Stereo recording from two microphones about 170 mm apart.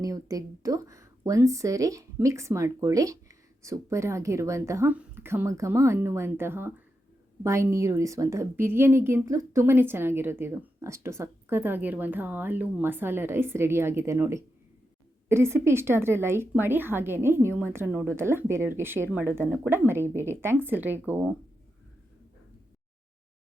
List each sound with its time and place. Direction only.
0.0 s a woman's voice: 20° right (ahead or behind)